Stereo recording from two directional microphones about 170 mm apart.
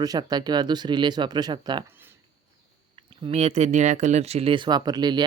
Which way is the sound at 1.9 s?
10° right (ahead or behind).